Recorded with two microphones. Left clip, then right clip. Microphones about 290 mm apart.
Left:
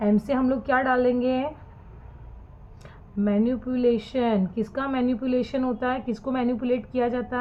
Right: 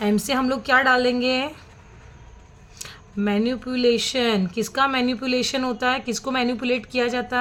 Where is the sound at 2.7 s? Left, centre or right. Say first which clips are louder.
Right 2 dB; right.